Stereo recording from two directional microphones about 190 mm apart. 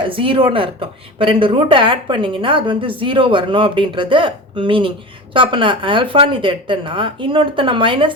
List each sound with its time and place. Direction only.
0.0 s a woman's voice: 25° right (ahead or behind)